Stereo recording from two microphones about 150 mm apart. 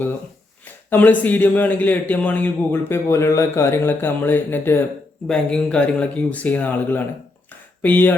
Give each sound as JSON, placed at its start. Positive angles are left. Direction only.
{"t": 0.6, "sound": "a man's voice", "side_deg": 10}